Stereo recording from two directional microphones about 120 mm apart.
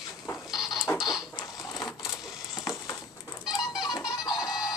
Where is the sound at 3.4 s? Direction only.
35° left (ahead or behind).